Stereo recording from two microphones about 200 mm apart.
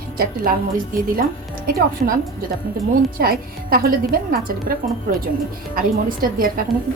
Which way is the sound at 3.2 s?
50° right (ahead or behind).